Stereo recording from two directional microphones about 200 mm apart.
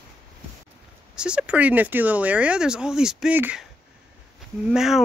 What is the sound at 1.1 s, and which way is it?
Speech, 5° right (ahead or behind).